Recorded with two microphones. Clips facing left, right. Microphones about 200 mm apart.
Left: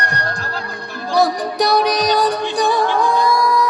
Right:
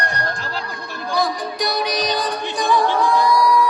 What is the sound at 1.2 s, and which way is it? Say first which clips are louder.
Music: left 5 dB; 70° left (ahead or behind).